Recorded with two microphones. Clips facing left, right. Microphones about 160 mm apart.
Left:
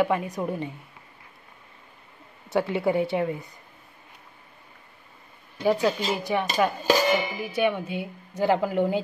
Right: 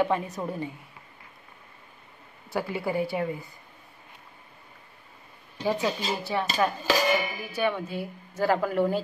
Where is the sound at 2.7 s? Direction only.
25° left (ahead or behind).